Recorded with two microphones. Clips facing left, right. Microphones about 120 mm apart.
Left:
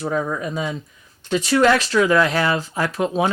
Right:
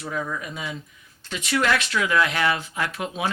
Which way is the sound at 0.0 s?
35° left (ahead or behind).